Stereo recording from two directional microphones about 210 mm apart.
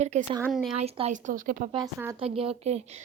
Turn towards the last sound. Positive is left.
turn(degrees=-30)  # may be behind; listen again after turning